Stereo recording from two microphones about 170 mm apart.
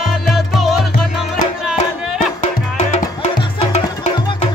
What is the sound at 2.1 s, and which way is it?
Music, 45° left (ahead or behind).